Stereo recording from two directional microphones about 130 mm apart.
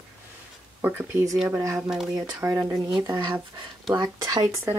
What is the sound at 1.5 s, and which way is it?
Speech, 20° right (ahead or behind).